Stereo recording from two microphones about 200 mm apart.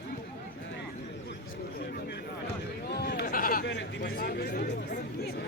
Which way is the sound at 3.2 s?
45° left (ahead or behind).